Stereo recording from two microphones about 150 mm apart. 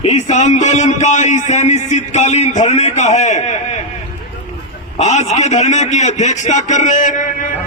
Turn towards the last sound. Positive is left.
turn(degrees=60)  # may be behind; listen again after turning